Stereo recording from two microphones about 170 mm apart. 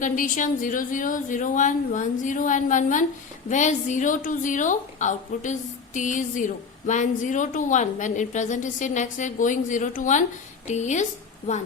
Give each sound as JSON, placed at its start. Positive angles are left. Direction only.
{"t": 0.0, "sound": "a woman's voice", "side_deg": 50}